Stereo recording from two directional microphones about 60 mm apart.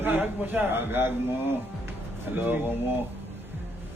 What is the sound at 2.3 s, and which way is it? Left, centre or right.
Speech, right.